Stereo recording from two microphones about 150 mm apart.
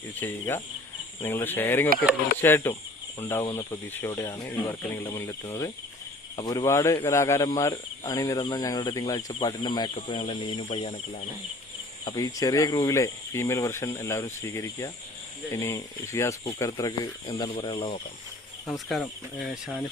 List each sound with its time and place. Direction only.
0.2 s speech: 15° left (ahead or behind); by 11.2 s 45° left (ahead or behind)
12.0 s speech: 25° left (ahead or behind)
18.7 s speech: centre (ahead or behind)